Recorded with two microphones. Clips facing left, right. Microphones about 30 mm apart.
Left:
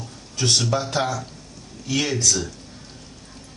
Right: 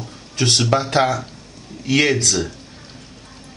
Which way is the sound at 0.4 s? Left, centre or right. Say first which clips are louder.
Right 4 dB; right.